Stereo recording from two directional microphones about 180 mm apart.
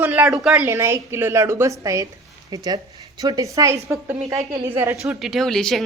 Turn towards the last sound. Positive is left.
turn(degrees=5)  # may be behind; listen again after turning